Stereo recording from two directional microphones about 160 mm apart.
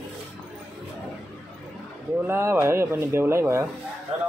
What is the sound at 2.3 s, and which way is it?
Speech, 15° right (ahead or behind).